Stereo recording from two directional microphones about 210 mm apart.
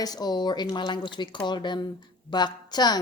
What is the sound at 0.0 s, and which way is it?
A woman's voice, 20° left (ahead or behind).